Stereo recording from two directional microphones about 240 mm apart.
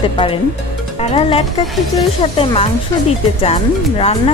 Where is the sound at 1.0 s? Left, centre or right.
Left.